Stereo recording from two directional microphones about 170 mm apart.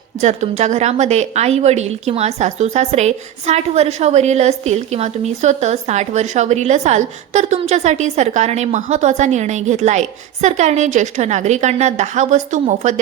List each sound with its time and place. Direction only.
0.2 s a woman's voice: 40° right (ahead or behind)